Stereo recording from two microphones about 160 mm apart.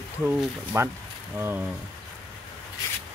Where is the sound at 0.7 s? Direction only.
15° right (ahead or behind).